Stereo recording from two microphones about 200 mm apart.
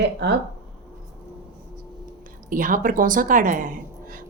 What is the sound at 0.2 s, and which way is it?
Speech, 55° right (ahead or behind).